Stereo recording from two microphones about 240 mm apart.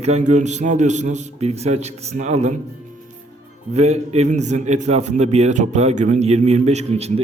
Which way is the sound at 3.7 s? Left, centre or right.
Right.